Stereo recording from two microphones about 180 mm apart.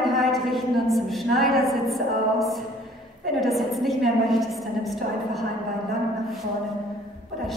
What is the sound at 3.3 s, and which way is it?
A woman's voice, centre (ahead or behind).